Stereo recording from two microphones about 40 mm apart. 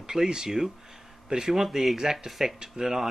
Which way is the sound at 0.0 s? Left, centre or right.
Centre.